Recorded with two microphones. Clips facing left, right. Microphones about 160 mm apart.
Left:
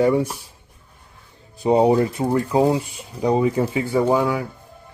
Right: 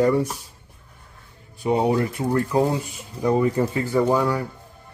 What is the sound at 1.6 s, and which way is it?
Speech, 30° left (ahead or behind).